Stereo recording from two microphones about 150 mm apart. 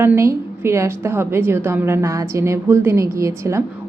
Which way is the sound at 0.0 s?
15° right (ahead or behind).